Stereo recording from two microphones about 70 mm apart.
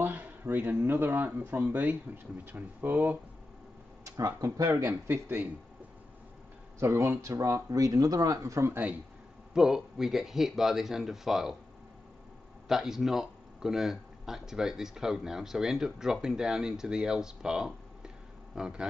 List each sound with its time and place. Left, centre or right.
0.0 s speech: right
4.4 s speech: right
4.8 s speech: right
6.8 s speech: right
9.5 s speech: centre
12.6 s speech: centre